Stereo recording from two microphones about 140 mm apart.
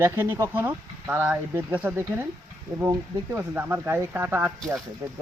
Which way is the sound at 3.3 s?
15° right (ahead or behind).